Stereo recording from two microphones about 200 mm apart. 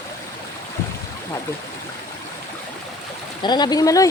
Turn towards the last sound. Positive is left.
turn(degrees=15)  # may be behind; listen again after turning